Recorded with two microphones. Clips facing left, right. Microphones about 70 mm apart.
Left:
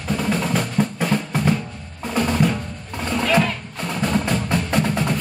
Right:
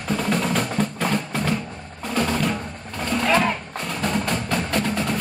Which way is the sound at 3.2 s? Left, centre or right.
Centre.